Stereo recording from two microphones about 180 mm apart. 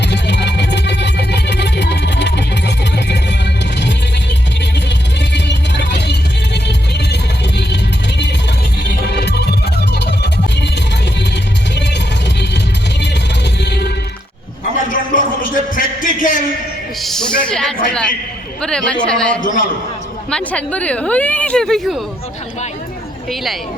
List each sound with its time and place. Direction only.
0.0 s music: 70° left (ahead or behind)
4.9 s music: 75° left (ahead or behind)
9.1 s music: 70° left (ahead or behind)
11.7 s music: 75° left (ahead or behind)
13.6 s music: 70° left (ahead or behind)
14.8 s a sound: 50° left (ahead or behind)
17.0 s a sound: centre (ahead or behind)
19.4 s a sound: 45° left (ahead or behind)
20.3 s speech: 5° left (ahead or behind)
23.3 s speech: centre (ahead or behind)